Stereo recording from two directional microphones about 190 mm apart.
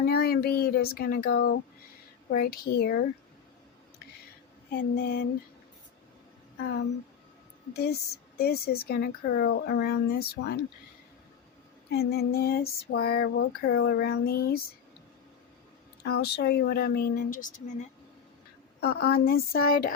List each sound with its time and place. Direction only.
0.0 s a woman's voice: 55° left (ahead or behind)
4.9 s a woman's voice: 60° left (ahead or behind)
7.7 s a woman's voice: 55° left (ahead or behind)
11.9 s a woman's voice: 55° left (ahead or behind)
16.0 s a woman's voice: 60° left (ahead or behind)
18.8 s a woman's voice: 55° left (ahead or behind)